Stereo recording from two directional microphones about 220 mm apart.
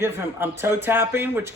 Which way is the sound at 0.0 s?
10° right (ahead or behind).